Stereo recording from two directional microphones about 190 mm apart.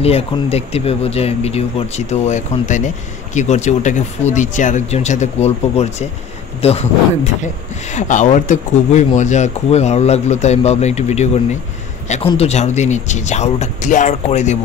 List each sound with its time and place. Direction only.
0.0 s speech: 30° left (ahead or behind)
7.9 s speech: 40° left (ahead or behind)
12.3 s speech: 35° left (ahead or behind)